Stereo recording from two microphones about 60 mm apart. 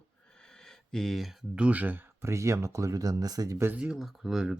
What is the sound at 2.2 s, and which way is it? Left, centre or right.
Speech, right.